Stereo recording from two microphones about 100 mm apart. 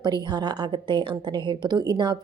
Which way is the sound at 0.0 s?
45° right (ahead or behind).